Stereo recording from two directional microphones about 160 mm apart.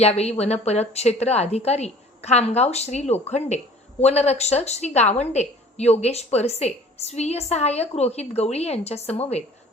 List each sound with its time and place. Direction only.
0.0 s a woman's voice: 40° left (ahead or behind)